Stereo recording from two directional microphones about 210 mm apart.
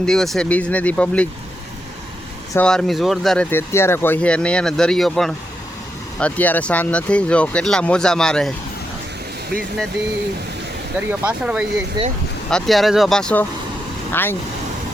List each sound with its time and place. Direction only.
0.0 s speech: centre (ahead or behind)
2.5 s speech: 5° left (ahead or behind)
11.1 s speech: 5° right (ahead or behind)
12.0 s speech: 20° right (ahead or behind)
12.5 s speech: centre (ahead or behind)